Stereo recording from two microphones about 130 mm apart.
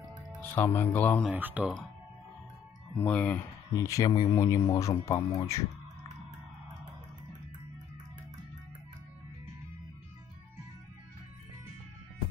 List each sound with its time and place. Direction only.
0.4 s speech: 15° left (ahead or behind)
1.3 s speech: 10° right (ahead or behind)
3.0 s speech: 10° left (ahead or behind)
3.7 s speech: 25° left (ahead or behind)